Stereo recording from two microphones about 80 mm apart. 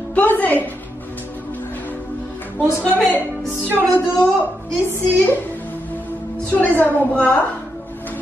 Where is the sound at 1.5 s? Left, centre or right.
Left.